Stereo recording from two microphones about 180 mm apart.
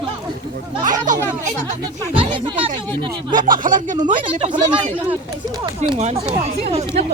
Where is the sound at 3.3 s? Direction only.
50° right (ahead or behind).